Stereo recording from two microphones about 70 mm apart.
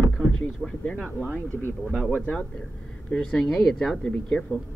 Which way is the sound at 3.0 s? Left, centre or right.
Centre.